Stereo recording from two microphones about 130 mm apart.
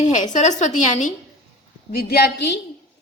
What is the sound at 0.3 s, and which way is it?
Speech, 65° left (ahead or behind).